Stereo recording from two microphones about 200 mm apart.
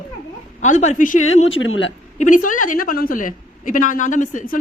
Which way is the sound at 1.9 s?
40° left (ahead or behind).